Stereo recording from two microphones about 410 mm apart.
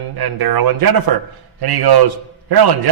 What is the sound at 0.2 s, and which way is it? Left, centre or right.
A man's voice, right.